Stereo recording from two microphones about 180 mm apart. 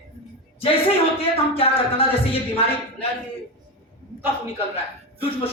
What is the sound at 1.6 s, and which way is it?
Speech, 30° left (ahead or behind).